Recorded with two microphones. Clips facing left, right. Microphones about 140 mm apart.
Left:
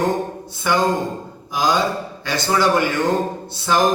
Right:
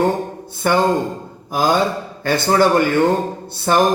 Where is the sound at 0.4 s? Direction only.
50° right (ahead or behind).